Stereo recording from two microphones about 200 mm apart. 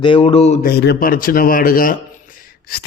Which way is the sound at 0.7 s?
55° left (ahead or behind).